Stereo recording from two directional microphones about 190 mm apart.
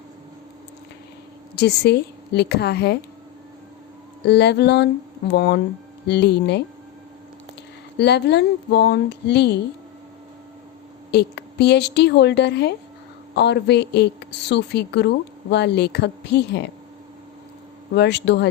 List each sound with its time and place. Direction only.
1.5 s a woman's voice: 60° left (ahead or behind)
4.2 s a woman's voice: 60° left (ahead or behind)
7.9 s a woman's voice: 60° left (ahead or behind)
11.1 s a woman's voice: 60° left (ahead or behind)
17.9 s a woman's voice: 65° left (ahead or behind)